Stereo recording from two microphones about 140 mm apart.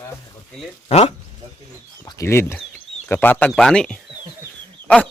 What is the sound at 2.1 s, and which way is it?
Speech, 20° left (ahead or behind).